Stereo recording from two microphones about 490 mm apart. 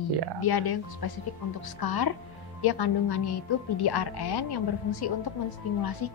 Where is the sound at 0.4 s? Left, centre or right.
Left.